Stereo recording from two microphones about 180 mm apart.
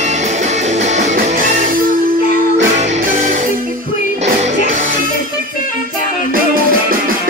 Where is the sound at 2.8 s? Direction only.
40° right (ahead or behind).